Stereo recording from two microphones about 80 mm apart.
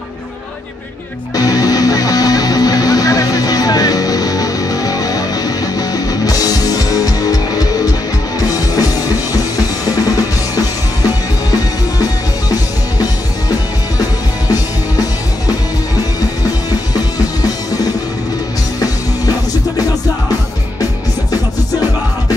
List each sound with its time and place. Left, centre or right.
1.3 s music: left
9.8 s drum kit: left
11.5 s music: left
14.5 s music: left
17.4 s music: left